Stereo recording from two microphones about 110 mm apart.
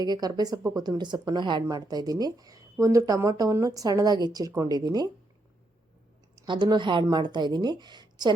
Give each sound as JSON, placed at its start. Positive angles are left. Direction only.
{"t": 0.0, "sound": "speech", "side_deg": -35}
{"t": 6.4, "sound": "speech", "side_deg": -40}